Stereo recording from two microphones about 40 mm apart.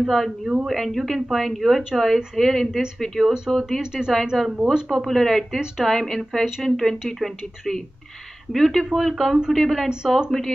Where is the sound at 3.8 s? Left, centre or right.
Centre.